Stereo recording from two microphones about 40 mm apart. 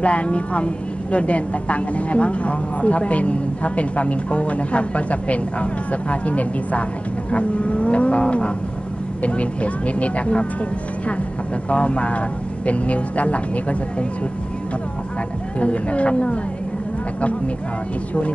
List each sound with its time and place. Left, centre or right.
0.0 s a woman's voice: left
11.7 s a woman's voice: left
15.6 s a woman's voice: left